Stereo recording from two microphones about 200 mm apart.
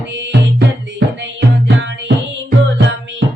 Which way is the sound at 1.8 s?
65° right (ahead or behind).